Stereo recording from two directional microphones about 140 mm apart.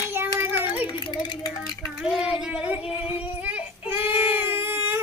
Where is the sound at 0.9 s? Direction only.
35° left (ahead or behind).